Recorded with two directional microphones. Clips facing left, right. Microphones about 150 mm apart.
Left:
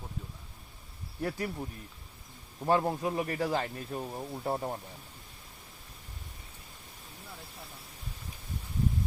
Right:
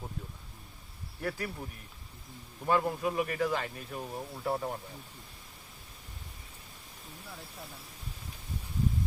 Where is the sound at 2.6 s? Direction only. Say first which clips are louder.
Left 1 dB; 30° left (ahead or behind).